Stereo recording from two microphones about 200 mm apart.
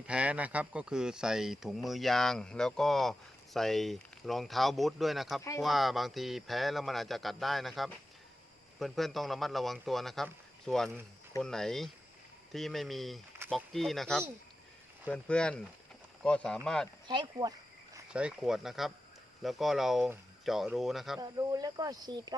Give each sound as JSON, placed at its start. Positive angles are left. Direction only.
{"t": 0.1, "sound": "speech", "side_deg": -5}
{"t": 17.1, "sound": "speech", "side_deg": -20}
{"t": 18.1, "sound": "speech", "side_deg": -5}
{"t": 21.2, "sound": "speech", "side_deg": -20}